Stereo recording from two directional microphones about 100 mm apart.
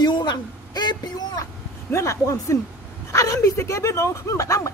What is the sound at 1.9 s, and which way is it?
A man's voice, 30° left (ahead or behind).